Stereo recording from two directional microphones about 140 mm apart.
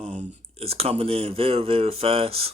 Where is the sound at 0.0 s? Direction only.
50° right (ahead or behind).